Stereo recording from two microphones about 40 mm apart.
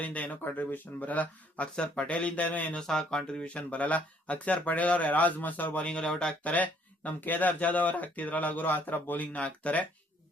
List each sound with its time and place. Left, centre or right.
0.0 s speech: left
1.7 s speech: left
2.8 s speech: centre; by 5.8 s left
5.8 s speech: left
6.4 s speech: left
9.3 s speech: left